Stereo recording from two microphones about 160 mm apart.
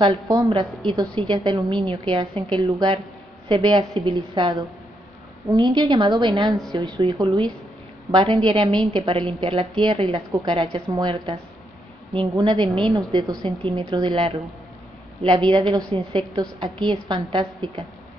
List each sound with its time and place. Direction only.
0.5 s a woman's voice: 35° right (ahead or behind)